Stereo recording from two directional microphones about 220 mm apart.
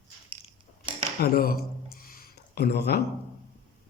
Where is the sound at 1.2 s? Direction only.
45° left (ahead or behind).